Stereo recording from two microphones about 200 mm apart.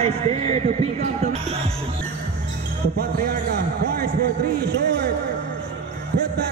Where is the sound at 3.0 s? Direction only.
50° right (ahead or behind).